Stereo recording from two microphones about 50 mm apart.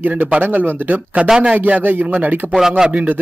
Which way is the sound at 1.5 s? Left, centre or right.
Right.